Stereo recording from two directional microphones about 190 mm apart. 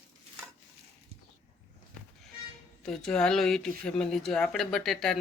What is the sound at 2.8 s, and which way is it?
Speech, 5° left (ahead or behind).